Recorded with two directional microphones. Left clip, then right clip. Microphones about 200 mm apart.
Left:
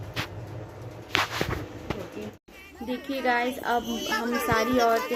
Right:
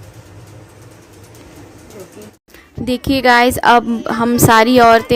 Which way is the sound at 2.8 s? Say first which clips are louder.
Right 14 dB; 55° right (ahead or behind).